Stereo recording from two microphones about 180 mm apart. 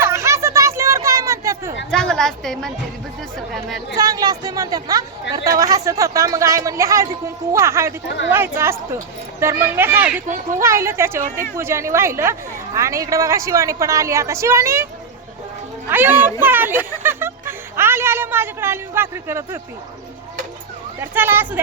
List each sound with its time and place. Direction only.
0.0 s a sound: 15° right (ahead or behind)
1.9 s a woman's voice: 5° left (ahead or behind)
3.9 s a woman's voice: 20° right (ahead or behind)
15.9 s a woman's voice: 10° right (ahead or behind)
16.4 s a sound: 10° right (ahead or behind)
21.0 s a woman's voice: 10° right (ahead or behind)